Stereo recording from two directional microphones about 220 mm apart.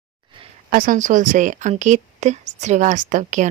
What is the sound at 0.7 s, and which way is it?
Speech, 40° right (ahead or behind).